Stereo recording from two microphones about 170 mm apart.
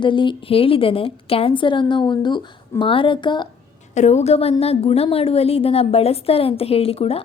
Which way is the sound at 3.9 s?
45° left (ahead or behind).